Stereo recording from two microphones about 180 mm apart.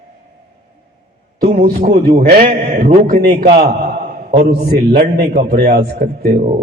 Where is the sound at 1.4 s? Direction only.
55° right (ahead or behind).